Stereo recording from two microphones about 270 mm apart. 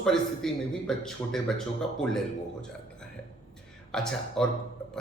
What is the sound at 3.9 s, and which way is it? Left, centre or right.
Speech, centre.